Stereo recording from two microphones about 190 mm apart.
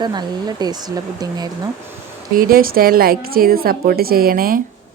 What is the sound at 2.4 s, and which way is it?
Speech, 50° right (ahead or behind).